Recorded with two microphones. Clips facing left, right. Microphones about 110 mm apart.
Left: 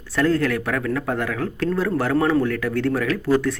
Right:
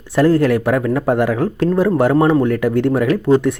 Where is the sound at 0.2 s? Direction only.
30° right (ahead or behind).